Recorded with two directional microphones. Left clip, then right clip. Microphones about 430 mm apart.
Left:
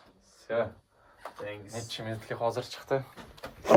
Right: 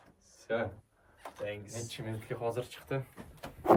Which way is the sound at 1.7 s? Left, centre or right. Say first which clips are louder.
Left 4 dB; centre.